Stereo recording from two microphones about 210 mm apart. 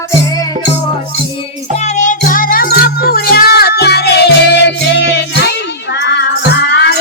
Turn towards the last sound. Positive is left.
turn(degrees=50)  # may be behind; listen again after turning